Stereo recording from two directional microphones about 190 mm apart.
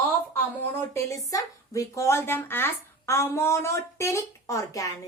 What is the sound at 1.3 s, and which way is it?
Speech, 15° left (ahead or behind).